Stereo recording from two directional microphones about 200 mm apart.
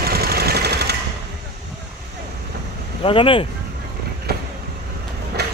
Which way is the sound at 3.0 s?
25° left (ahead or behind).